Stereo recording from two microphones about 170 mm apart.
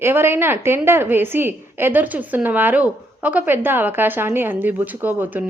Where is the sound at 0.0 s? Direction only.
15° right (ahead or behind).